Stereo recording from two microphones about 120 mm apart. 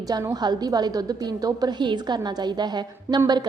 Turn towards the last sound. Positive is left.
turn(degrees=-35)  # may be behind; listen again after turning